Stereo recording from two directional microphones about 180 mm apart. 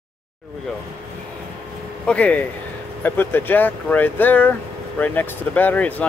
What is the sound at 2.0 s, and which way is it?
Speech, 10° left (ahead or behind).